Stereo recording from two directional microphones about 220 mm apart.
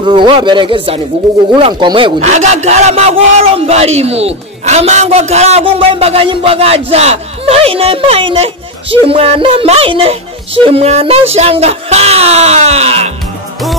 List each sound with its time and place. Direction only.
0.0 s speech: 20° right (ahead or behind)